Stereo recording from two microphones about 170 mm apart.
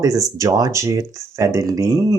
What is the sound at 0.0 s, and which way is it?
Speech, 20° right (ahead or behind).